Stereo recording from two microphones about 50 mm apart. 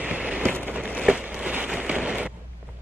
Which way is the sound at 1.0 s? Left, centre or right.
Centre.